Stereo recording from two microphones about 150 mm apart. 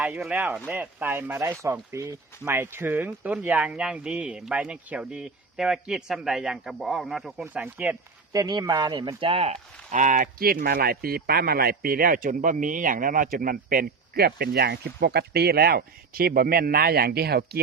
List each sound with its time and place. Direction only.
0.0 s speech: 5° right (ahead or behind)
8.3 s speech: 25° right (ahead or behind)
9.9 s speech: 60° right (ahead or behind); by 17.6 s 90° right